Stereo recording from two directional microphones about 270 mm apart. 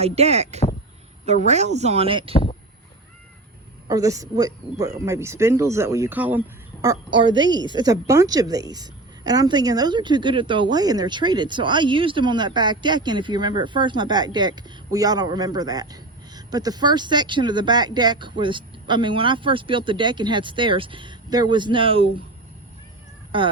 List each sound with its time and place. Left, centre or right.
0.0 s speech: right
2.3 s speech: left
3.8 s a woman's voice: centre
23.3 s speech: centre